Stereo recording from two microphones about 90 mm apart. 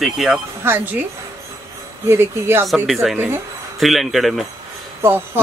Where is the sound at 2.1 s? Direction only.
25° right (ahead or behind).